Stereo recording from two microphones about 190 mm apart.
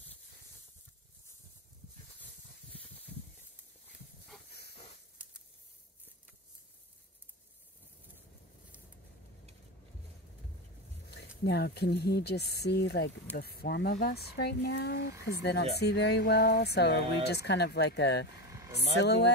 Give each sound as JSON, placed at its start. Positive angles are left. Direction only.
{"t": 11.1, "sound": "speech", "side_deg": 60}